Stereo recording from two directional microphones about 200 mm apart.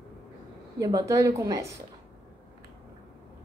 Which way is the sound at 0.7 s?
15° right (ahead or behind).